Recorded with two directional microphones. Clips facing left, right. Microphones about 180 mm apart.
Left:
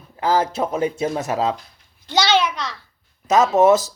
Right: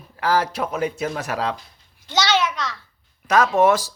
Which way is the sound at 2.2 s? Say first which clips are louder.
Left 2 dB; 15° left (ahead or behind).